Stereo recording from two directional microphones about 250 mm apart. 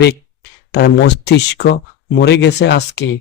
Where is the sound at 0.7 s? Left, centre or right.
Left.